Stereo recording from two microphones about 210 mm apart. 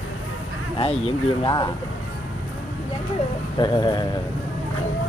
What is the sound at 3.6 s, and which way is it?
Speech, 20° left (ahead or behind).